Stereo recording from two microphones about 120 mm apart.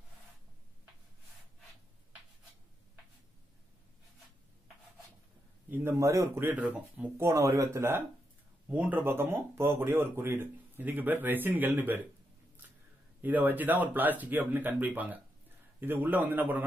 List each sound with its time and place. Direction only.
5.7 s speech: 20° right (ahead or behind)
8.6 s speech: 10° right (ahead or behind)
13.2 s speech: 15° right (ahead or behind)